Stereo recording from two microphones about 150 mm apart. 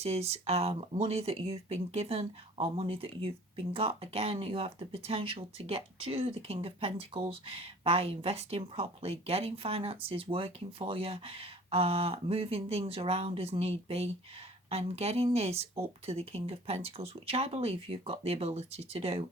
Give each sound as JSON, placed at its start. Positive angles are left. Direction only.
{"t": 0.0, "sound": "speech", "side_deg": -45}